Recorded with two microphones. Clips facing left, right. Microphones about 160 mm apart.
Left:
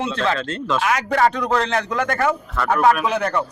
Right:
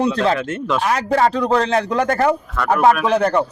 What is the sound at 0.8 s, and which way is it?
A man's voice, 35° right (ahead or behind).